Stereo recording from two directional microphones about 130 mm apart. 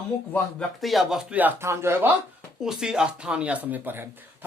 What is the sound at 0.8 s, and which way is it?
Speech, centre (ahead or behind).